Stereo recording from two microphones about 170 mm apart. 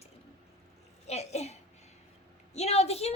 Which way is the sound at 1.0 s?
40° left (ahead or behind).